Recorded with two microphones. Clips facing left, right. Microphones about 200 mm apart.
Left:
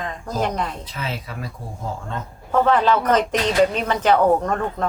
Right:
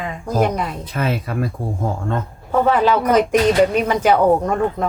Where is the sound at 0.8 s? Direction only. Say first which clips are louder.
Right 8 dB; 55° right (ahead or behind).